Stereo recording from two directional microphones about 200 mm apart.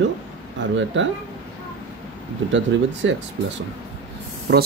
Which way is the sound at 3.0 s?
70° right (ahead or behind).